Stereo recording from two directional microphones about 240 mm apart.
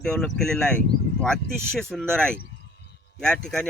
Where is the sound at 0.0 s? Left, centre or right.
Centre.